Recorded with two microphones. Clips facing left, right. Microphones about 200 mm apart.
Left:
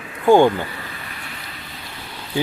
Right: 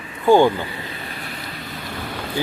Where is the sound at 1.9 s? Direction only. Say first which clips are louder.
Right 10 dB; 50° right (ahead or behind).